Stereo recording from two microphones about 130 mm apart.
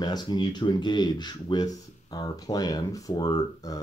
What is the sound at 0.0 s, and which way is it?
Speech, 35° left (ahead or behind).